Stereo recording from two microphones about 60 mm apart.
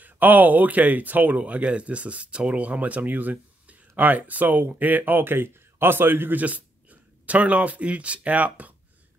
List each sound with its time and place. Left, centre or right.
0.0 s speech: right
6.4 s speech: right